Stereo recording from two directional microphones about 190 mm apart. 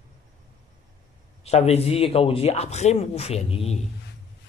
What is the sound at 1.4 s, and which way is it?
Speech, 35° left (ahead or behind).